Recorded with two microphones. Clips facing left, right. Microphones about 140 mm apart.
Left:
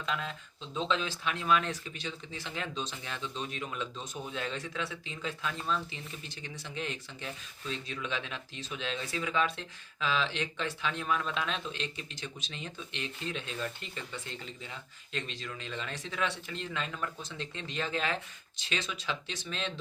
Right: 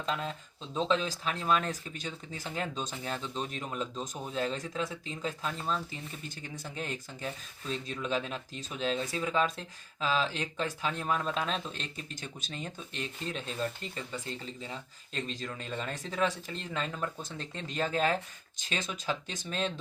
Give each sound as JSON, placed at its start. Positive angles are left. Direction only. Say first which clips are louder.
{"t": 0.0, "sound": "speech", "louder": "right 2 dB", "side_deg": -35}